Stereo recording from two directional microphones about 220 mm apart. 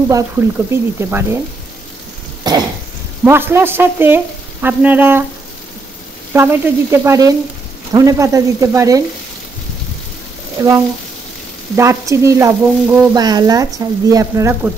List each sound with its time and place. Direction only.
0.1 s speech: 10° right (ahead or behind)
2.4 s cough: 20° right (ahead or behind)
3.3 s speech: 10° right (ahead or behind)
6.3 s speech: 10° right (ahead or behind)
10.6 s speech: 15° right (ahead or behind)